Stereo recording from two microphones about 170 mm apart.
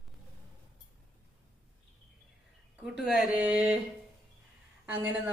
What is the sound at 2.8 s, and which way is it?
Speech, 5° right (ahead or behind).